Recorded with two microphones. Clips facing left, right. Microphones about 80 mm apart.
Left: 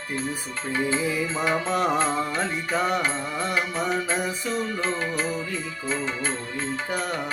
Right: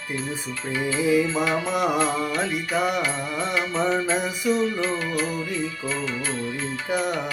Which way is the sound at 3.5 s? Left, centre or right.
Centre.